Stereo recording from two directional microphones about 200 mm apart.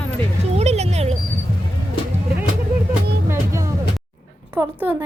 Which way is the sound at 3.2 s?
15° right (ahead or behind).